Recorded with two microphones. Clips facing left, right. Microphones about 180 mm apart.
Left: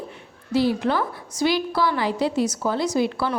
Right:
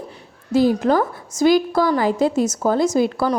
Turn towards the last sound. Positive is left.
turn(degrees=-45)  # may be behind; listen again after turning